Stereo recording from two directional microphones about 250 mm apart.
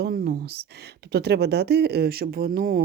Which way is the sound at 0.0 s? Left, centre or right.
Right.